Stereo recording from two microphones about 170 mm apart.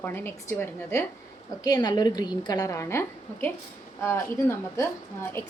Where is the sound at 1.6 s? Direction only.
25° left (ahead or behind).